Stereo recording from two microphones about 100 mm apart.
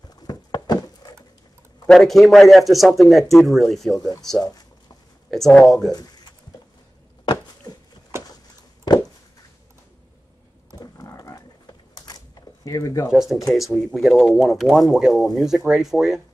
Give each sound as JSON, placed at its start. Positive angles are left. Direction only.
{"t": 0.3, "sound": "a sound", "side_deg": 40}
{"t": 1.9, "sound": "speech", "side_deg": 0}
{"t": 5.3, "sound": "speech", "side_deg": 5}
{"t": 10.8, "sound": "a sound", "side_deg": 40}
{"t": 12.6, "sound": "speech", "side_deg": 35}
{"t": 13.1, "sound": "speech", "side_deg": -5}